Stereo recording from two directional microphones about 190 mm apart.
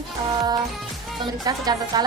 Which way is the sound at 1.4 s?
20° right (ahead or behind).